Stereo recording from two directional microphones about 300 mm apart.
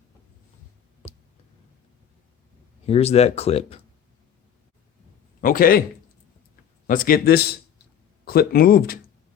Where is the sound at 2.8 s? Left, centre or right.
Left.